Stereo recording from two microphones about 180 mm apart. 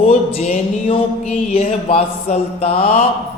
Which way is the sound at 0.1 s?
35° left (ahead or behind).